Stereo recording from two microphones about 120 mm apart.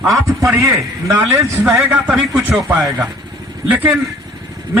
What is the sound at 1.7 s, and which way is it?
Speech, 15° right (ahead or behind).